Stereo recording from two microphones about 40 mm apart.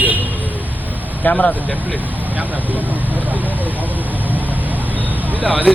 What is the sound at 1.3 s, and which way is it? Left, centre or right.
Speech, left.